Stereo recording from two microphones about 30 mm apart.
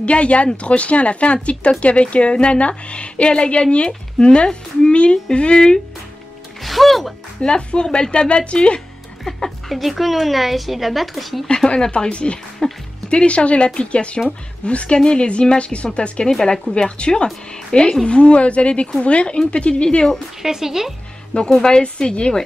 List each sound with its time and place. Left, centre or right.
0.0 s a woman's voice: left
6.6 s speech: centre
7.4 s a woman's voice: left
9.7 s speech: centre
11.4 s a woman's voice: left
12.6 s speech: left
13.1 s a woman's voice: left
16.3 s speech: centre
17.0 s speech: left
18.0 s a woman's voice: left
20.4 s speech: centre
21.3 s speech: left
21.9 s a woman's voice: left